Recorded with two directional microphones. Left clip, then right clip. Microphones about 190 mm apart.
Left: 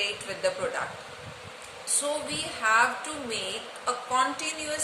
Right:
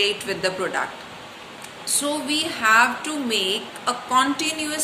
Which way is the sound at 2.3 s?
15° left (ahead or behind).